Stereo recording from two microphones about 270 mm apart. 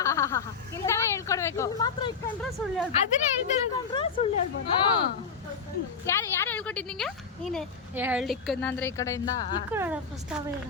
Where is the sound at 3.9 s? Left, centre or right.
Centre.